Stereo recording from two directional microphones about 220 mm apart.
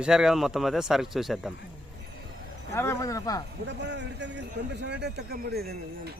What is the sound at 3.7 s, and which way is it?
A man's voice, 55° right (ahead or behind).